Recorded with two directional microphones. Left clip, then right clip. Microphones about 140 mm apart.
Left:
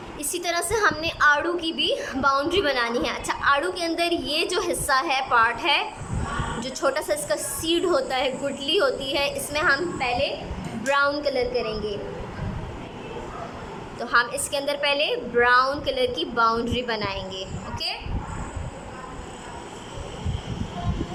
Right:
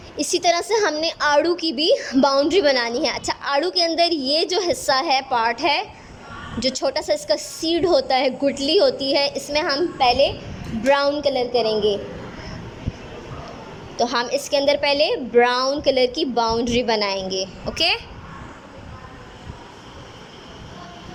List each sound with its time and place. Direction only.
0.2 s a woman's voice: 35° right (ahead or behind)
10.0 s a woman's voice: 50° right (ahead or behind)
11.1 s a woman's voice: 30° right (ahead or behind)
14.0 s a woman's voice: 35° right (ahead or behind)